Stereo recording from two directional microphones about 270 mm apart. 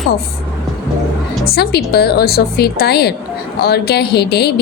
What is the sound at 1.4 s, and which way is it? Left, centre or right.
A woman's voice, left.